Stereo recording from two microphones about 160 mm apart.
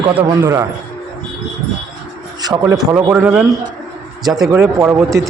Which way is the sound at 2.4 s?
20° right (ahead or behind).